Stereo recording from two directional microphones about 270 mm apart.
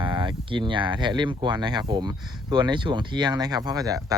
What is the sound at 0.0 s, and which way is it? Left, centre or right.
Speech, centre.